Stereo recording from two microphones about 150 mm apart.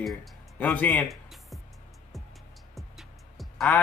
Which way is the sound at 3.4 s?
Centre (ahead or behind).